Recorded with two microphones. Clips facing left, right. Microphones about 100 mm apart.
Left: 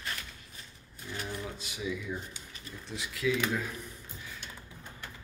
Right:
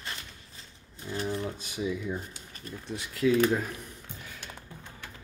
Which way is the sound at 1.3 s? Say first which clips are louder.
Right 5 dB; 40° right (ahead or behind).